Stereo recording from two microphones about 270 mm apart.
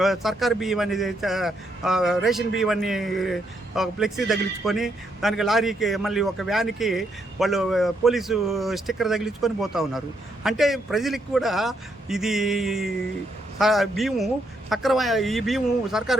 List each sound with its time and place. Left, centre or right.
0.0 s a man's voice: centre